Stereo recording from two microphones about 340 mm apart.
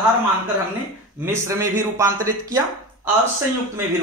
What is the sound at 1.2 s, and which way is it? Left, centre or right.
Speech, centre.